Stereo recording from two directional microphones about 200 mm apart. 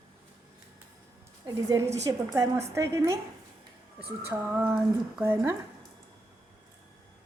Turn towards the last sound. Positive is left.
turn(degrees=-10)  # may be behind; listen again after turning